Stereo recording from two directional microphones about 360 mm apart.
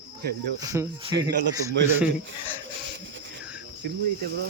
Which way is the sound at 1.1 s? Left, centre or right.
Right.